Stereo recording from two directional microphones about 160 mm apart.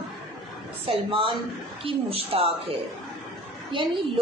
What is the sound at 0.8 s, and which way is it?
A woman's voice, 35° right (ahead or behind).